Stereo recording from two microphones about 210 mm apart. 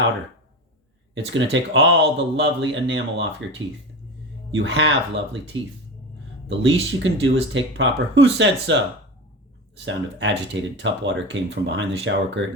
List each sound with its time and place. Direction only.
1.1 s speech: 65° right (ahead or behind)
4.5 s speech: 60° right (ahead or behind)
5.5 s speech: 25° right (ahead or behind)
6.5 s speech: 60° right (ahead or behind)